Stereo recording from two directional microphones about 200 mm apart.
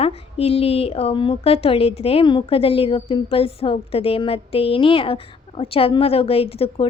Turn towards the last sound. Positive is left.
turn(degrees=30)  # may be behind; listen again after turning